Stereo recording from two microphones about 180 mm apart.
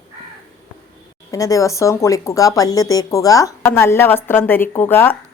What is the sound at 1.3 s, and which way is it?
A woman's voice, 20° left (ahead or behind).